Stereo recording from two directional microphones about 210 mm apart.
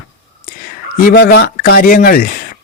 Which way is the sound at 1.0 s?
45° left (ahead or behind).